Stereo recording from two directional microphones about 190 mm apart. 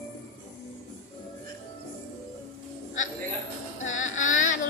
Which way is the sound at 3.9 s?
40° left (ahead or behind).